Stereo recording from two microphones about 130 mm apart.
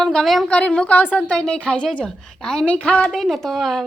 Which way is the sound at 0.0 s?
Centre (ahead or behind).